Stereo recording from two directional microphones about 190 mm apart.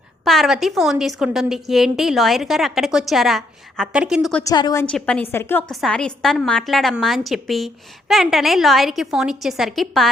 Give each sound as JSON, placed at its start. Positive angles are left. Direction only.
{"t": 0.3, "sound": "a woman's voice", "side_deg": 0}
{"t": 4.4, "sound": "a woman's voice", "side_deg": 20}
{"t": 4.9, "sound": "a woman's voice", "side_deg": 5}